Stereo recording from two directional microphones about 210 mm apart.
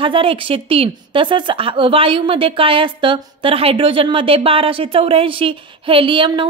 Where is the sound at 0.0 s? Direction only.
25° right (ahead or behind).